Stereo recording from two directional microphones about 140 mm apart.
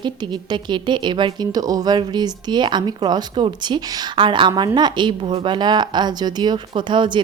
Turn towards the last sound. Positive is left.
turn(degrees=-35)  # may be behind; listen again after turning